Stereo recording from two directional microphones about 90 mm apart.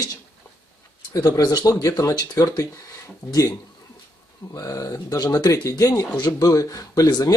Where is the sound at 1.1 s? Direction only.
45° left (ahead or behind).